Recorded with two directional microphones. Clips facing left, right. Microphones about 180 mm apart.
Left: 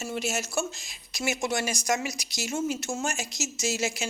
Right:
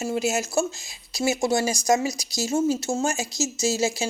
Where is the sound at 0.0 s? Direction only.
30° right (ahead or behind).